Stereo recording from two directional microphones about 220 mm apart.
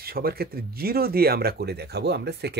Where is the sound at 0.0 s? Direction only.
45° right (ahead or behind).